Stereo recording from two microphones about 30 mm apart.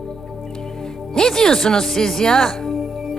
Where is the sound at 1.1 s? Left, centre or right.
Centre.